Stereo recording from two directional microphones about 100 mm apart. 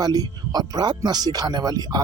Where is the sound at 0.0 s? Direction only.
40° right (ahead or behind).